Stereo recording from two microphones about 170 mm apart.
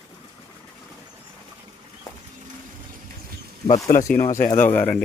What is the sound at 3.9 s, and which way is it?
Speech, 50° left (ahead or behind).